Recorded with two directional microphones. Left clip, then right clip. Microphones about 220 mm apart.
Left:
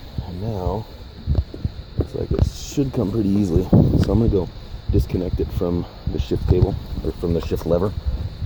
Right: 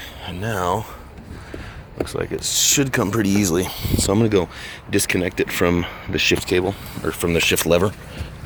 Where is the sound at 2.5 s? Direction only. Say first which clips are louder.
Right 7 dB; 20° left (ahead or behind).